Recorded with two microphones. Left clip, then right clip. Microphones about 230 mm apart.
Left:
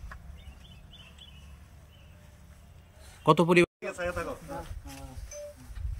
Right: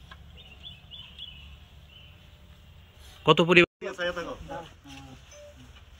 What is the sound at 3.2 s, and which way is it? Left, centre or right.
Speech, centre.